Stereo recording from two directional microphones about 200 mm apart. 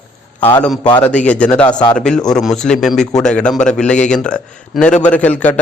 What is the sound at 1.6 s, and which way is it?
Speech, 20° left (ahead or behind).